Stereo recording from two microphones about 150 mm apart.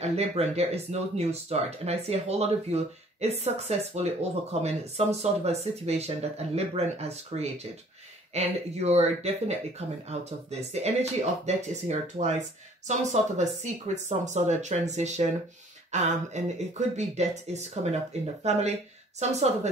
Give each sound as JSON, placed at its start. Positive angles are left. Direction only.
{"t": 0.0, "sound": "speech", "side_deg": -45}